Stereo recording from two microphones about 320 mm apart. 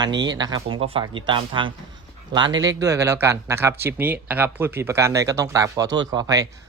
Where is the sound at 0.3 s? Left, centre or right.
Centre.